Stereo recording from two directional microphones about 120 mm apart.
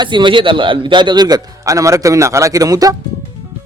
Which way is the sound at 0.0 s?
40° right (ahead or behind).